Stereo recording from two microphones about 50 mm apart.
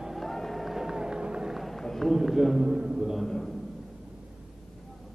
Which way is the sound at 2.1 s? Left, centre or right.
Centre.